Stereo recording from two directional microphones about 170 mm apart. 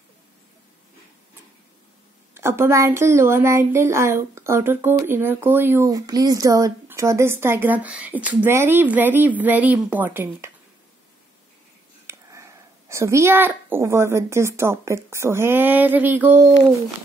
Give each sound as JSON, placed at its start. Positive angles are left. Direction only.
{"t": 2.3, "sound": "a woman's voice", "side_deg": -15}
{"t": 12.1, "sound": "a woman's voice", "side_deg": -15}